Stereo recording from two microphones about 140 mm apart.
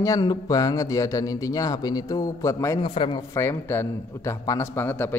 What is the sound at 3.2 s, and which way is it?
Speech, 20° left (ahead or behind).